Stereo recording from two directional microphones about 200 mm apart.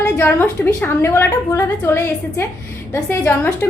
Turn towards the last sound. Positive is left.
turn(degrees=10)  # may be behind; listen again after turning